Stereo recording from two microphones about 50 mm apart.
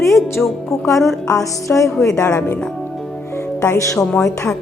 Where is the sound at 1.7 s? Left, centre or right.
Left.